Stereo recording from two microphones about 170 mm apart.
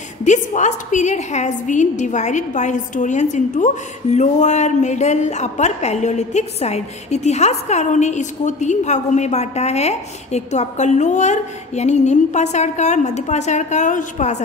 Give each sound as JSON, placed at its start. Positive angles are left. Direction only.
{"t": 0.2, "sound": "a woman's voice", "side_deg": 45}